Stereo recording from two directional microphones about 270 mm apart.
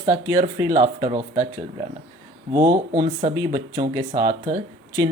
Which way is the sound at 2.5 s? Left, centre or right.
Centre.